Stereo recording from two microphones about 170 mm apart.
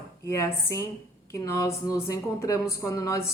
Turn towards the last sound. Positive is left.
turn(degrees=20)  # may be behind; listen again after turning